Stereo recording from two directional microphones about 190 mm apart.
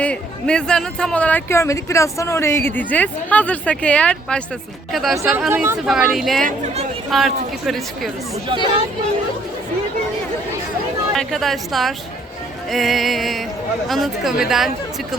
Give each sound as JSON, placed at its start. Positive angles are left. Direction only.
{"t": 0.0, "sound": "speech", "side_deg": 5}
{"t": 5.2, "sound": "speech", "side_deg": -10}
{"t": 6.4, "sound": "speech", "side_deg": -40}
{"t": 7.1, "sound": "speech", "side_deg": 0}
{"t": 11.1, "sound": "speech", "side_deg": 0}